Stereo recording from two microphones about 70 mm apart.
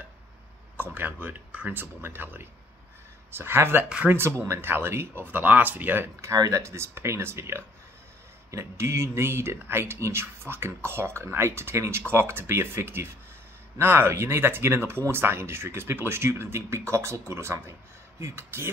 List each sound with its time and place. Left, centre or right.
0.7 s speech: right
6.3 s speech: right